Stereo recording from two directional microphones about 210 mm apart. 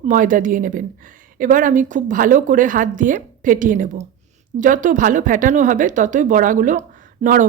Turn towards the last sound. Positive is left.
turn(degrees=-40)  # may be behind; listen again after turning